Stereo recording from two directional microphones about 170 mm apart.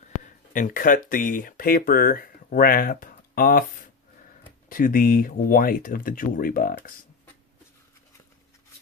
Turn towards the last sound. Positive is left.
turn(degrees=55)  # may be behind; listen again after turning